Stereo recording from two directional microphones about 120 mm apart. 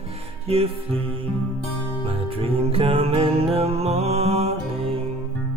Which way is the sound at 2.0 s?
50° right (ahead or behind).